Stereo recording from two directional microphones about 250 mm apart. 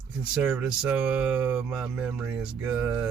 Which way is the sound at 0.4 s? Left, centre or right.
Centre.